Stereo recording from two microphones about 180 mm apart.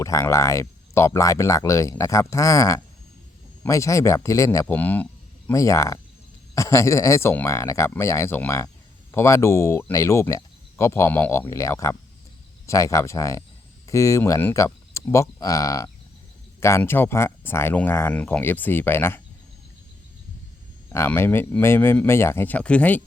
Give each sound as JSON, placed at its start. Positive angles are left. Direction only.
{"t": 0.0, "sound": "speech", "side_deg": 15}
{"t": 20.9, "sound": "speech", "side_deg": 15}